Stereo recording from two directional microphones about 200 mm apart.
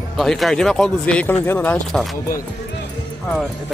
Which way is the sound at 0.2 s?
Centre (ahead or behind).